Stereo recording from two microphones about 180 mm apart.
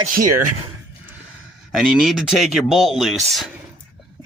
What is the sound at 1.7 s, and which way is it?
Speech, 5° right (ahead or behind).